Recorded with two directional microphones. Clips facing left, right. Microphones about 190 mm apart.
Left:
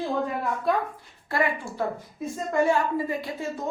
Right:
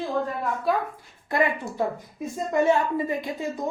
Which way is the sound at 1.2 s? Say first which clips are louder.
Right 2 dB; 20° right (ahead or behind).